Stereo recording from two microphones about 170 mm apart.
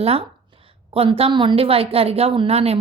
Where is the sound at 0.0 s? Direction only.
35° right (ahead or behind).